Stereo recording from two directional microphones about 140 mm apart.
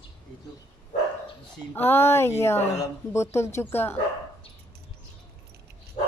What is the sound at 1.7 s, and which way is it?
Speech, 15° left (ahead or behind).